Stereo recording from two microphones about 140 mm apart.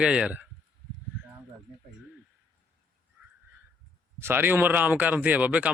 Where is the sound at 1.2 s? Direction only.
15° right (ahead or behind).